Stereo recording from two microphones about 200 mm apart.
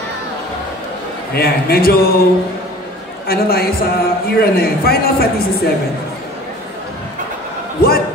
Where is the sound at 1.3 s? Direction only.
50° left (ahead or behind).